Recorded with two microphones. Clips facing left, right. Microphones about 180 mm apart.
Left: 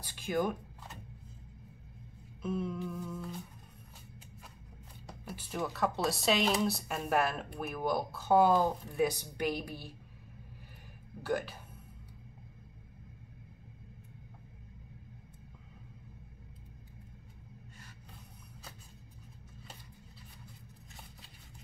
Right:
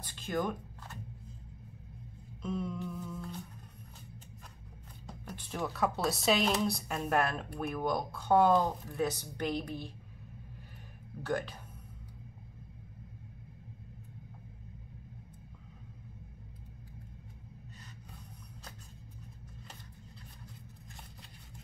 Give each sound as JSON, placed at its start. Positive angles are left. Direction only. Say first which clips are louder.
{"t": 0.0, "sound": "a sound", "louder": "left 2 dB", "side_deg": 10}
{"t": 2.4, "sound": "speech", "louder": "left 1 dB", "side_deg": 5}
{"t": 5.2, "sound": "speech", "louder": "left 1 dB", "side_deg": 5}
{"t": 11.2, "sound": "speech", "louder": "left 1 dB", "side_deg": 5}